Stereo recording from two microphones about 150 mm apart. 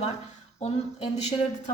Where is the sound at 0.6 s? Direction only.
45° left (ahead or behind).